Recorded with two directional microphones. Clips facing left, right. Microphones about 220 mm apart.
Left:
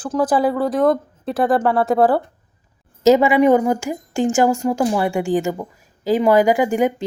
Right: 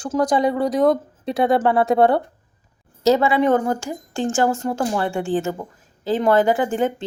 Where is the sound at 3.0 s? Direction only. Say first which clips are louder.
Left 4 dB; 15° left (ahead or behind).